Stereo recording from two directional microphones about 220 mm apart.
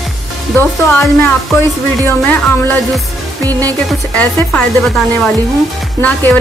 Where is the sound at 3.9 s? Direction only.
5° left (ahead or behind).